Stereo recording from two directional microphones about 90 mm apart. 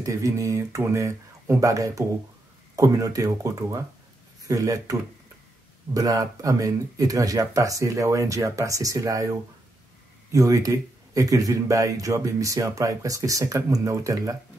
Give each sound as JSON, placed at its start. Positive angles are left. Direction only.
{"t": 0.0, "sound": "speech", "side_deg": -35}
{"t": 5.9, "sound": "speech", "side_deg": -40}
{"t": 10.3, "sound": "speech", "side_deg": -40}